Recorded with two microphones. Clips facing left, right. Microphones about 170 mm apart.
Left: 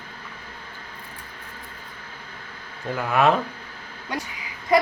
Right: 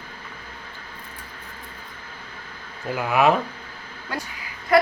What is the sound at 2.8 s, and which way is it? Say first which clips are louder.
Speech: right 1 dB; 5° right (ahead or behind).